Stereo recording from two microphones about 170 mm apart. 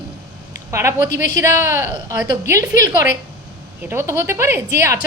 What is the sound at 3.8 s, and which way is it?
A woman's voice, 15° right (ahead or behind).